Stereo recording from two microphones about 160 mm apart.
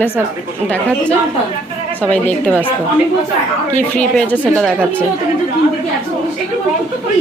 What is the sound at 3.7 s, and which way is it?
Speech, 10° left (ahead or behind).